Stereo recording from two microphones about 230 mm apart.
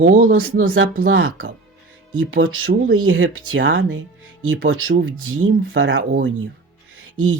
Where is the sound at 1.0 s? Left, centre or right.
Right.